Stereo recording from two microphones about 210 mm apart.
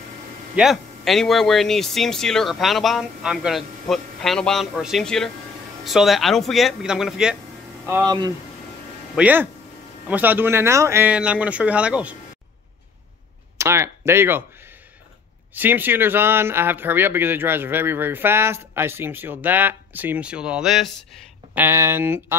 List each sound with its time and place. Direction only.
0.6 s speech: centre (ahead or behind)
7.8 s speech: 15° right (ahead or behind)
9.1 s speech: 10° right (ahead or behind)
13.6 s speech: 15° right (ahead or behind)